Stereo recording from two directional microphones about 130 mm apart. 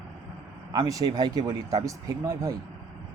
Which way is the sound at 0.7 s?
30° right (ahead or behind).